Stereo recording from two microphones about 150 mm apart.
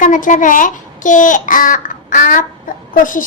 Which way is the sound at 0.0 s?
60° left (ahead or behind).